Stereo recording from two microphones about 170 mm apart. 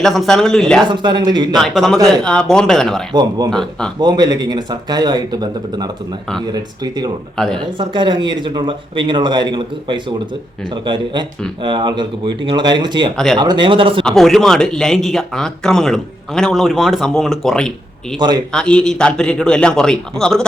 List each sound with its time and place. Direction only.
0.0 s speech: centre (ahead or behind)
0.9 s speech: 25° right (ahead or behind)
1.5 s speech: centre (ahead or behind)
3.1 s speech: 25° right (ahead or behind)
3.5 s speech: 5° left (ahead or behind)
4.0 s speech: 25° right (ahead or behind)
7.3 s speech: 5° left (ahead or behind)
7.6 s speech: 30° right (ahead or behind)
14.0 s speech: centre (ahead or behind)